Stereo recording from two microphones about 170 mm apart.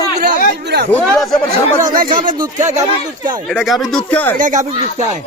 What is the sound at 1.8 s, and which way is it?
Speech, 50° right (ahead or behind).